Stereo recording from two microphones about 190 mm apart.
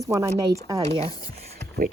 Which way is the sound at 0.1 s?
15° right (ahead or behind).